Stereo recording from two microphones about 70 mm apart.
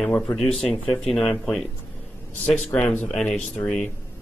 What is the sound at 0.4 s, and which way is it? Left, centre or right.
Speech, centre.